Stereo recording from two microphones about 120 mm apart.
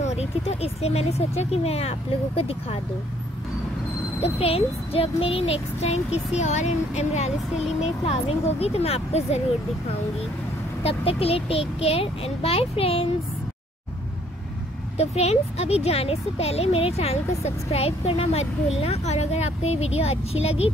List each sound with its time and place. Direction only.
0.0 s speech: 65° left (ahead or behind)
4.2 s speech: 55° left (ahead or behind)
10.8 s a child's voice: 55° left (ahead or behind)
15.0 s speech: 60° left (ahead or behind)